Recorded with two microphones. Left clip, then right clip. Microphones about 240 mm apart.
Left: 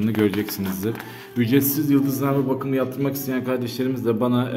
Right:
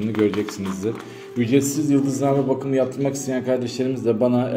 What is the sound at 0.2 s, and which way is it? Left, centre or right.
A man's voice, left.